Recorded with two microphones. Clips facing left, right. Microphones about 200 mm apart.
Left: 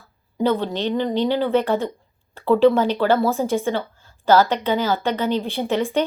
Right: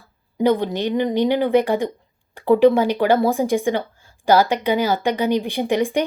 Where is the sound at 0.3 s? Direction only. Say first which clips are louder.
Right 2 dB; 15° right (ahead or behind).